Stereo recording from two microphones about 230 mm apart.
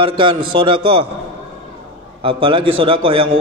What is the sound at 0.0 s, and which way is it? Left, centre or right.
A man's voice, right.